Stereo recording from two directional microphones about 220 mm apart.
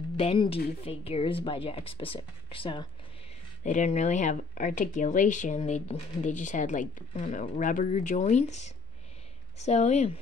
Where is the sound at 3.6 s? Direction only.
35° left (ahead or behind).